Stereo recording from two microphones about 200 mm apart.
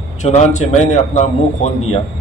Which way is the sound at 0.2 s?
35° left (ahead or behind).